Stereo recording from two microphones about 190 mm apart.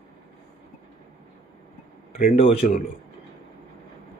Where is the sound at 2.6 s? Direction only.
40° left (ahead or behind).